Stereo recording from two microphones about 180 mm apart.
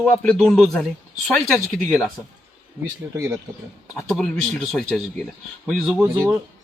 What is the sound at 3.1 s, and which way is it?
Speech, 20° right (ahead or behind).